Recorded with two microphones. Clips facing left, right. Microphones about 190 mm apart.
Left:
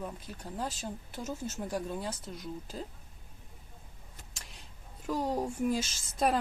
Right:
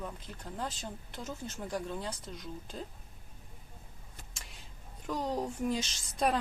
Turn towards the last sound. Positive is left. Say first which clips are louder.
# left 1 dB
turn(degrees=5)  # may be behind; listen again after turning